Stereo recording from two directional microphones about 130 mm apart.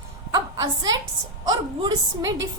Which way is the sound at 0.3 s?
30° right (ahead or behind).